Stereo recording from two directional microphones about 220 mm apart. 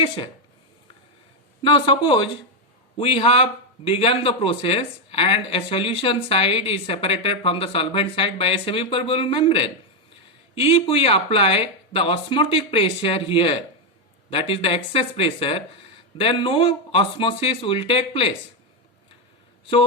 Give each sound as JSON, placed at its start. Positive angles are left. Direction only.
{"t": 1.6, "sound": "speech", "side_deg": 20}